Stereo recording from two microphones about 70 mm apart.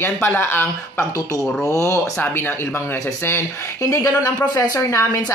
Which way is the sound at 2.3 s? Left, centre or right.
Left.